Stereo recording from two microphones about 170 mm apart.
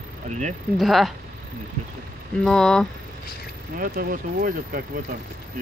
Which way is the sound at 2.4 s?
5° left (ahead or behind).